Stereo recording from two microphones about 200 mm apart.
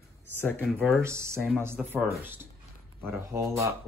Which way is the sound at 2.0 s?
Centre (ahead or behind).